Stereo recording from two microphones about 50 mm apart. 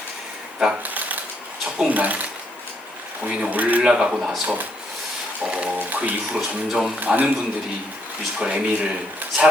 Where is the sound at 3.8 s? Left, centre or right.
Centre.